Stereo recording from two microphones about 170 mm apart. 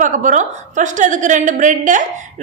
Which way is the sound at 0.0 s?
50° right (ahead or behind).